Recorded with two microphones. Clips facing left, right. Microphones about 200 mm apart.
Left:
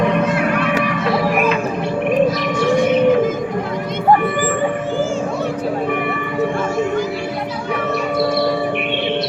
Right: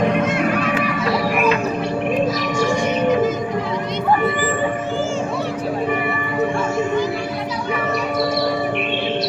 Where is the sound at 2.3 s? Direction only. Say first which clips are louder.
Left 3 dB; 55° left (ahead or behind).